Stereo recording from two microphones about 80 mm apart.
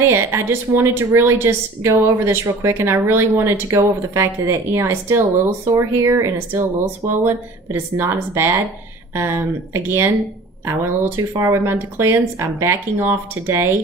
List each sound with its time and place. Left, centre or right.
0.0 s a woman's voice: right